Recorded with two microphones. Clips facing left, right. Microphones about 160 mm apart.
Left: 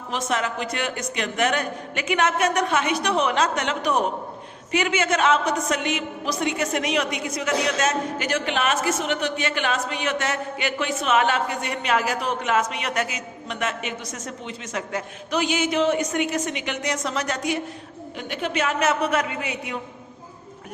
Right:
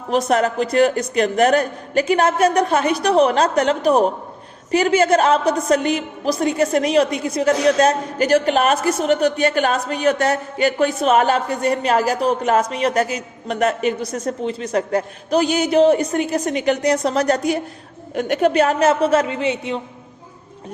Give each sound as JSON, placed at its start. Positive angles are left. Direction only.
{"t": 0.1, "sound": "a woman's voice", "side_deg": -40}